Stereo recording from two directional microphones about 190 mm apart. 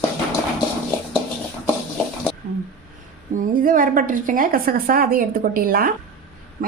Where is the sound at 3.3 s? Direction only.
45° right (ahead or behind).